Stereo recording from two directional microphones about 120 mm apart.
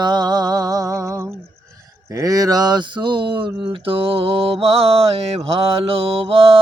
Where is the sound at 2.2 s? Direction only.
30° right (ahead or behind).